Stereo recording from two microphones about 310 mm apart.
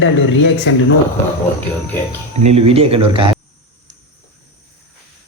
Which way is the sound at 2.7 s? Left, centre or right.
Centre.